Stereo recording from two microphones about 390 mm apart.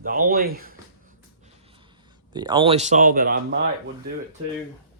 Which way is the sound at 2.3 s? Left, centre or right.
Centre.